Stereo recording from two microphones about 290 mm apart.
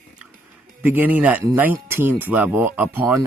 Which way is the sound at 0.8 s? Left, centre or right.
Centre.